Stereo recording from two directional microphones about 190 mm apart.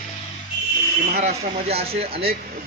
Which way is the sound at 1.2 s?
35° right (ahead or behind).